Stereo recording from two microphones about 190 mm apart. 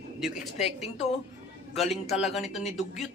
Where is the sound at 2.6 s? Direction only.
35° left (ahead or behind).